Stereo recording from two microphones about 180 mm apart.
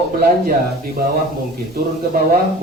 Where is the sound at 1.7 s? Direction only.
60° right (ahead or behind).